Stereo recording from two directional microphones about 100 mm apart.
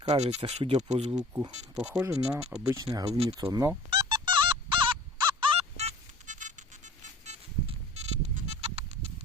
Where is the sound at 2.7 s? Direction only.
40° right (ahead or behind).